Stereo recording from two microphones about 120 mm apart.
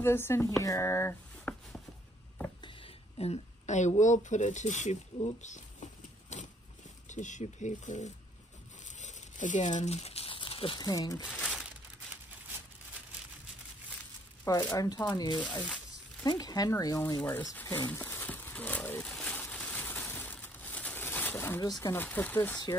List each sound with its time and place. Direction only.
0.0 s speech: 20° left (ahead or behind)
2.6 s speech: 55° left (ahead or behind); by 5.9 s 85° left
6.3 s a sound: 75° left (ahead or behind)
7.1 s speech: 90° left
8.8 s crumpling: 90° left; by 10.8 s 45° left (ahead or behind)
10.8 s speech: 30° left (ahead or behind)
11.4 s crumpling: centre (ahead or behind)
14.5 s speech: 30° left (ahead or behind)
17.6 s a sound: 20° left (ahead or behind)
21.5 s speech: 30° left (ahead or behind)
21.9 s speech: 15° left (ahead or behind)